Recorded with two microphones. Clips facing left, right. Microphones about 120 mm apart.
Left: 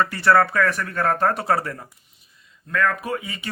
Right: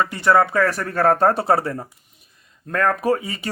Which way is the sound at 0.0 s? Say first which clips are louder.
Right 1 dB; 15° right (ahead or behind).